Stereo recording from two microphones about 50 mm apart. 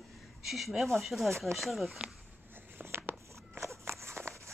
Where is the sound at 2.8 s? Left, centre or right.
Right.